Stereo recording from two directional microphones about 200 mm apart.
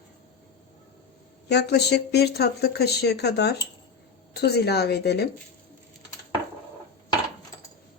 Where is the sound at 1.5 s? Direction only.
55° left (ahead or behind).